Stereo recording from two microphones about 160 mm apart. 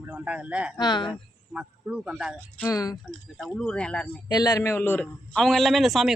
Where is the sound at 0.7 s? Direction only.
25° left (ahead or behind).